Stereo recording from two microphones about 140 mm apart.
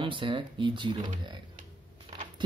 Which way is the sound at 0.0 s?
35° right (ahead or behind).